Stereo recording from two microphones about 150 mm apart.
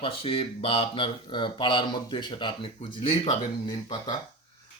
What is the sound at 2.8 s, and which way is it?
Speech, 45° left (ahead or behind).